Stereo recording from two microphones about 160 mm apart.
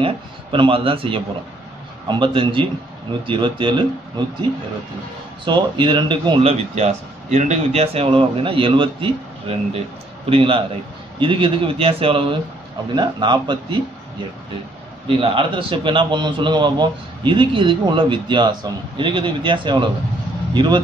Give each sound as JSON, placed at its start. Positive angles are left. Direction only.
{"t": 0.0, "sound": "a man's voice", "side_deg": -35}
{"t": 5.4, "sound": "a man's voice", "side_deg": -30}
{"t": 15.0, "sound": "a man's voice", "side_deg": -35}